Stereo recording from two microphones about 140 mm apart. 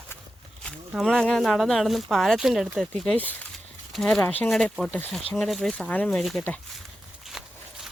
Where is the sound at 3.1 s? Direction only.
10° left (ahead or behind).